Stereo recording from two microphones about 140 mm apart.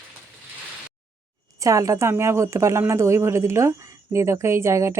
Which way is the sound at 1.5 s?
25° right (ahead or behind).